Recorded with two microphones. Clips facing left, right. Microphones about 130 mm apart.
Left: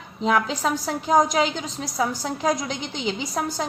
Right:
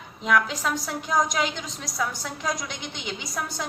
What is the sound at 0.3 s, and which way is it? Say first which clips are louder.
A woman's voice: left 2 dB; 35° left (ahead or behind).